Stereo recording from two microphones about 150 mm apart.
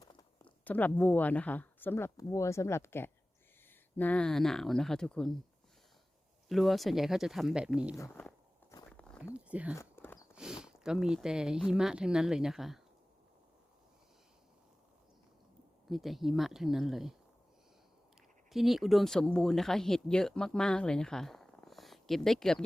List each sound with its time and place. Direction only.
0.0 s zipper: 30° left (ahead or behind)
0.6 s speech: 10° left (ahead or behind)
6.5 s speech: centre (ahead or behind)
7.9 s speech: 15° left (ahead or behind)
8.9 s a sound: centre (ahead or behind)
9.3 s speech: 10° right (ahead or behind)
9.7 s walk: 15° left (ahead or behind)
10.3 s speech: 5° right (ahead or behind)
15.9 s speech: centre (ahead or behind)
18.5 s speech: centre (ahead or behind)